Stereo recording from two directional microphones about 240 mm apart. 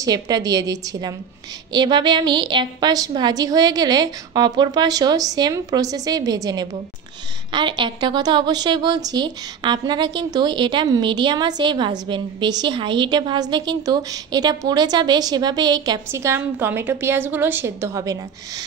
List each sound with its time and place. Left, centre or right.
0.0 s a woman's voice: centre